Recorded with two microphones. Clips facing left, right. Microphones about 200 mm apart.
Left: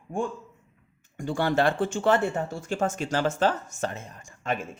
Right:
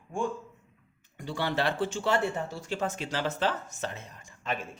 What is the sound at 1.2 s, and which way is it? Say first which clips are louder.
Speech: left 6 dB; 45° left (ahead or behind).